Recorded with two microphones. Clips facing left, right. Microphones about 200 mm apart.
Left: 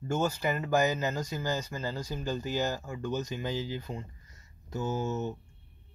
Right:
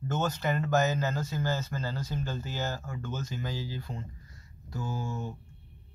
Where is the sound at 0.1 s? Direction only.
10° left (ahead or behind).